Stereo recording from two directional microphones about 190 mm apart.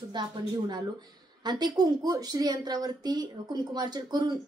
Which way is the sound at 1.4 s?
20° right (ahead or behind).